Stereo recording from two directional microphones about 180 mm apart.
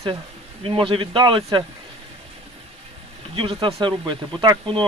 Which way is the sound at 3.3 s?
30° right (ahead or behind).